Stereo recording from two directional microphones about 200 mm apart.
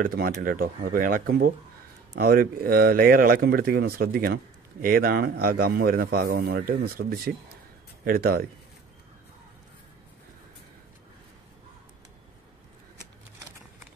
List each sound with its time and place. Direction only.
0.0 s a man's voice: 45° right (ahead or behind)